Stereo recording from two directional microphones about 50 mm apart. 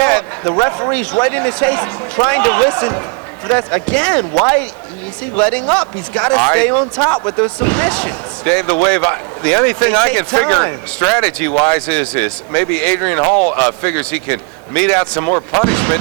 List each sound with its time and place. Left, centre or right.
0.0 s speech: left
15.2 s speech: left
15.5 s speech: left